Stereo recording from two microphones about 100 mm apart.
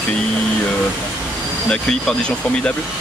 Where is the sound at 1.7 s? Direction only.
5° left (ahead or behind).